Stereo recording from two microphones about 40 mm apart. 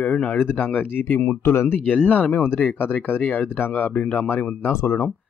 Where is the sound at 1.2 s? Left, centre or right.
Left.